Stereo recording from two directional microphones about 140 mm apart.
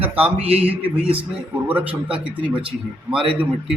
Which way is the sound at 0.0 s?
10° right (ahead or behind).